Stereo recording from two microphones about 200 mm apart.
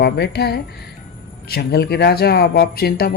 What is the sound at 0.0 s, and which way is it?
A woman's voice, 55° left (ahead or behind).